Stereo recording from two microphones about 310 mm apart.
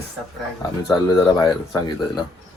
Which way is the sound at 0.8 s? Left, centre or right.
Centre.